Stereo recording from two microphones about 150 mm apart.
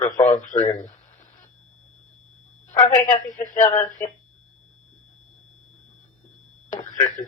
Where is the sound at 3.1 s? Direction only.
55° left (ahead or behind).